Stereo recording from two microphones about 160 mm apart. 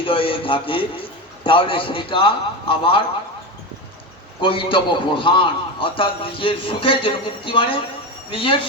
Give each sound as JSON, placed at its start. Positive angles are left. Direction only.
{"t": 0.0, "sound": "a man's voice", "side_deg": 35}
{"t": 4.4, "sound": "a man's voice", "side_deg": 35}